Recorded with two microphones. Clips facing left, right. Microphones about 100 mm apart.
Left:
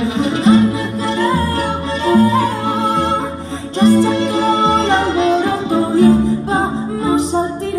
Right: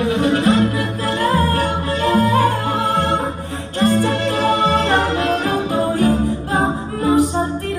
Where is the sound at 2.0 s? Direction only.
20° left (ahead or behind).